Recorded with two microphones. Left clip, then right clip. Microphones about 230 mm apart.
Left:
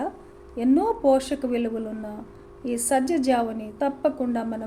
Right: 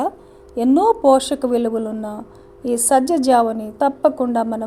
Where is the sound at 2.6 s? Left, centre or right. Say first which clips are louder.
Right 8 dB; right.